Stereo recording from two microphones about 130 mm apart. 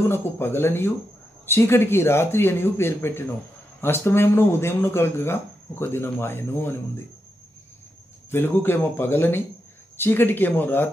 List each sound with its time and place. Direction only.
0.1 s speech: 20° left (ahead or behind)
8.3 s speech: 20° left (ahead or behind)